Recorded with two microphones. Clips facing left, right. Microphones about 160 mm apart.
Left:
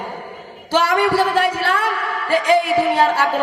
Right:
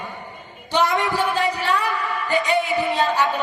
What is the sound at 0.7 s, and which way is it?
A man's voice, 70° left (ahead or behind).